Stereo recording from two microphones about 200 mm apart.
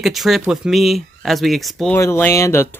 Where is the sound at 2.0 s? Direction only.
15° left (ahead or behind).